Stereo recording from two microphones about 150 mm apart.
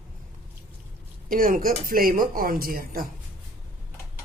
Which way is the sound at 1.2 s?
70° right (ahead or behind).